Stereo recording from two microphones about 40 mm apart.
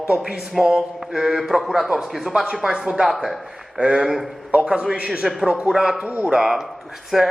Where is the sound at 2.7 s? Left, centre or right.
Right.